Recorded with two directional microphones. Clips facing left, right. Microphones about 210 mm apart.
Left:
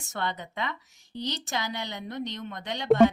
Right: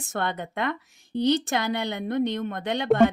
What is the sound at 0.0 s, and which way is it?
A woman's voice, 55° right (ahead or behind).